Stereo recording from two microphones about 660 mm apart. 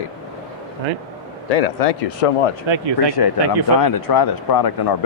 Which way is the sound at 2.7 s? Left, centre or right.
Right.